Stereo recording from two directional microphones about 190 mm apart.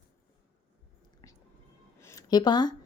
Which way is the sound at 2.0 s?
15° left (ahead or behind).